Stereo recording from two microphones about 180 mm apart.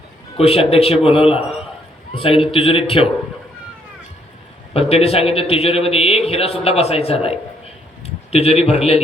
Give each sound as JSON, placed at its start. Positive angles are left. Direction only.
{"t": 0.3, "sound": "a man's voice", "side_deg": 35}
{"t": 4.7, "sound": "a man's voice", "side_deg": 35}